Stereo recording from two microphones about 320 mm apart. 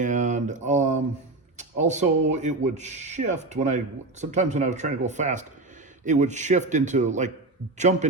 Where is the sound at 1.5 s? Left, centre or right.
Right.